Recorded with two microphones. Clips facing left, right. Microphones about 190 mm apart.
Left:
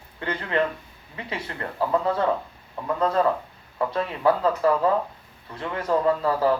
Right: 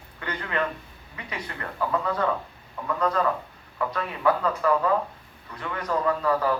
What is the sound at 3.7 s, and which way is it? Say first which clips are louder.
Speech: left 3 dB; 30° left (ahead or behind).